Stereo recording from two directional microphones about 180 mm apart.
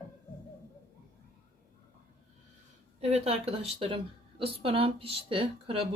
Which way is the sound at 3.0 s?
35° right (ahead or behind).